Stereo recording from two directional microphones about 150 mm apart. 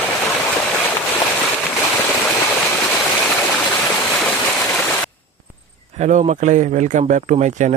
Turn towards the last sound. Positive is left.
turn(degrees=-55)  # may be behind; listen again after turning